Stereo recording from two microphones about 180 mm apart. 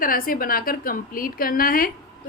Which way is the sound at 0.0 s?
55° left (ahead or behind).